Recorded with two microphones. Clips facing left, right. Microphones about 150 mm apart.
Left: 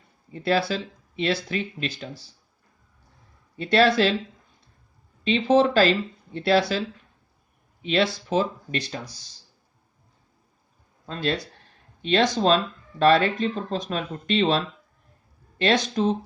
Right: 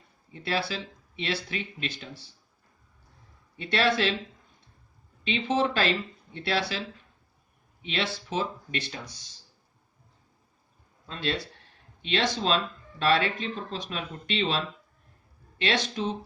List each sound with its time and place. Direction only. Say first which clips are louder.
0.3 s speech: left 7 dB; 40° left (ahead or behind)
3.6 s speech: left 6 dB; 35° left (ahead or behind)
5.2 s speech: left 7 dB; 35° left (ahead or behind)
11.0 s speech: left 4 dB; 40° left (ahead or behind)